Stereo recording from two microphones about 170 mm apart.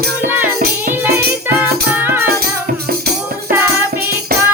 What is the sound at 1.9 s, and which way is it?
Music, 15° right (ahead or behind).